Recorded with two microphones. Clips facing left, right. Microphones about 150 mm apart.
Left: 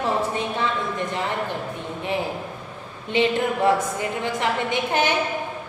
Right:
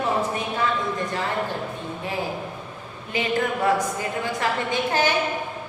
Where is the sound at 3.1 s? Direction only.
25° left (ahead or behind).